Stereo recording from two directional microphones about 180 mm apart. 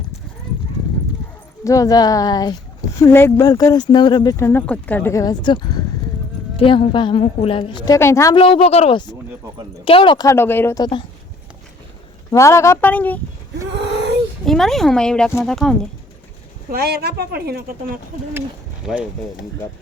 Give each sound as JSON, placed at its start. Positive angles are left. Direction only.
{"t": 1.6, "sound": "speech", "side_deg": 20}
{"t": 7.9, "sound": "speech", "side_deg": 15}
{"t": 8.4, "sound": "speech", "side_deg": 30}
{"t": 10.2, "sound": "speech", "side_deg": 10}
{"t": 12.3, "sound": "speech", "side_deg": 15}
{"t": 13.7, "sound": "a sound", "side_deg": -75}
{"t": 14.4, "sound": "speech", "side_deg": 0}
{"t": 16.7, "sound": "speech", "side_deg": -60}